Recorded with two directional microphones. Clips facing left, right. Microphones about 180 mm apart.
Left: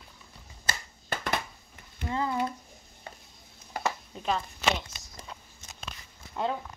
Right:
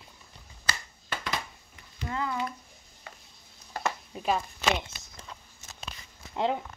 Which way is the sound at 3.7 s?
15° left (ahead or behind).